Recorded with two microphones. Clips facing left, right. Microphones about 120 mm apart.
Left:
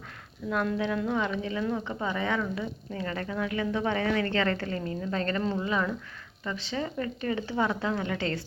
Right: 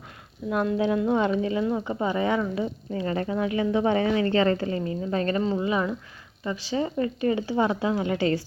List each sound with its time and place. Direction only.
0.5 s speech: 20° right (ahead or behind)